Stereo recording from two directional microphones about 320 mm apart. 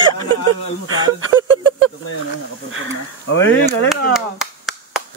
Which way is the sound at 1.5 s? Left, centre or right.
Right.